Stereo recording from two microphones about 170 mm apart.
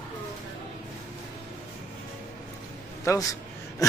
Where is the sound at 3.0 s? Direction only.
15° left (ahead or behind).